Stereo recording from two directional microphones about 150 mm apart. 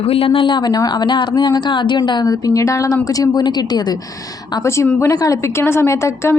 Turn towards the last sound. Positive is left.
turn(degrees=15)  # may be behind; listen again after turning